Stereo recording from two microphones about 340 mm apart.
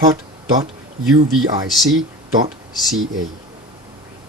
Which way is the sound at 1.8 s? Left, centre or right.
Centre.